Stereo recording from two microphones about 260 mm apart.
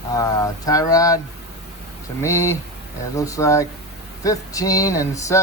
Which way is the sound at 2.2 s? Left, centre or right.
Centre.